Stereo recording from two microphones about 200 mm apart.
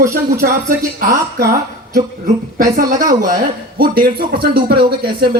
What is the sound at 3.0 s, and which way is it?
Speech, 20° right (ahead or behind).